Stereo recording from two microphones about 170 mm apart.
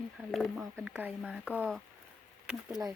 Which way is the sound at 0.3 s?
Centre (ahead or behind).